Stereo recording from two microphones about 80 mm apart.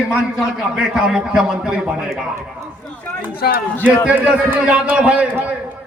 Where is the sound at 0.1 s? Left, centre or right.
Centre.